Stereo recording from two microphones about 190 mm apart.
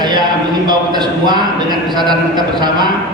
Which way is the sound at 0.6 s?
20° right (ahead or behind).